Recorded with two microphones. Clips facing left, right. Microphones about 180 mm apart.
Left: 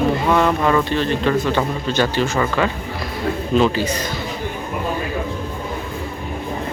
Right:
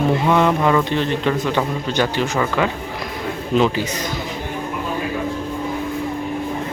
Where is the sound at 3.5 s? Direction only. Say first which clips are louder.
Even; 15° right (ahead or behind).